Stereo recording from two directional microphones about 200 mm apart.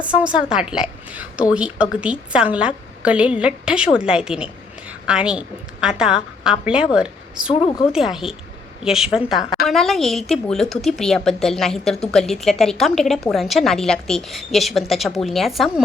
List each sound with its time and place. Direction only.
0.0 s a woman's voice: 5° right (ahead or behind)
7.5 s a woman's voice: 30° left (ahead or behind)
7.9 s speech: centre (ahead or behind)